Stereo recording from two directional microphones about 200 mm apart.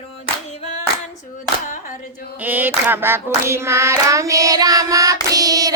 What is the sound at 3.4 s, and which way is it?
Hands, 15° right (ahead or behind).